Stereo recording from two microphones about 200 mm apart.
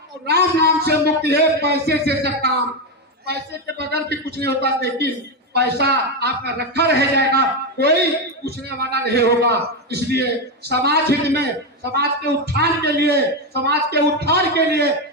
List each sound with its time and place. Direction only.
0.3 s a man's voice: 55° right (ahead or behind)
3.8 s a man's voice: 55° right (ahead or behind)